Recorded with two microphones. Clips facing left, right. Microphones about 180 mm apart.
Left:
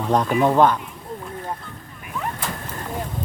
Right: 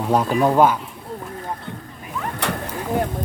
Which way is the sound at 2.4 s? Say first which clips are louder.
Right 5 dB; 70° right (ahead or behind).